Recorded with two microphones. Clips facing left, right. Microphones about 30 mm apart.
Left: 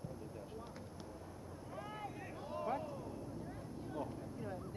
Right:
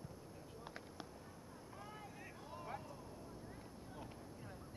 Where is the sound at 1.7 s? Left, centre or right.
Centre.